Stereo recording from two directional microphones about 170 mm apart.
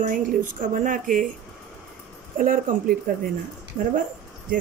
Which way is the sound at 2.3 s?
55° right (ahead or behind).